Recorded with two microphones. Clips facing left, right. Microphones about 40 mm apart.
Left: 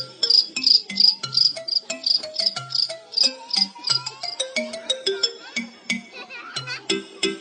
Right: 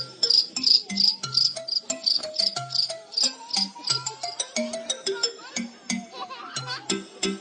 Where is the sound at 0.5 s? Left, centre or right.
Left.